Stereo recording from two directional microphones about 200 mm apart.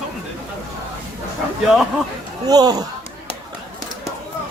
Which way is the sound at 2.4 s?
20° right (ahead or behind).